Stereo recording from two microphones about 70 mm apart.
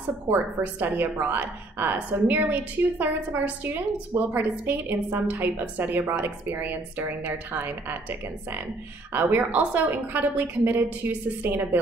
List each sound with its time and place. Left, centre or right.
0.3 s a woman's voice: right